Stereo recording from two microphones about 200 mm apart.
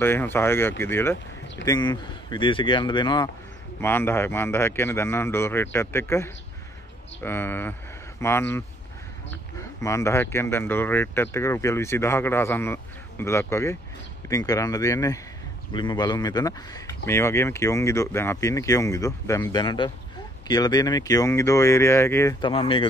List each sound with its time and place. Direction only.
0.0 s speech: 10° left (ahead or behind)
1.7 s speech: 20° left (ahead or behind)
3.8 s speech: 10° left (ahead or behind)
22.5 s speech: 25° left (ahead or behind)